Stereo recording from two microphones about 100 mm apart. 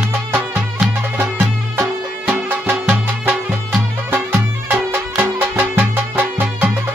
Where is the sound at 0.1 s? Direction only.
20° right (ahead or behind).